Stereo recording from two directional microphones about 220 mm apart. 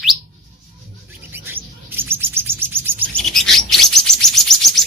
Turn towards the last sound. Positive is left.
turn(degrees=0)  # may be behind; listen again after turning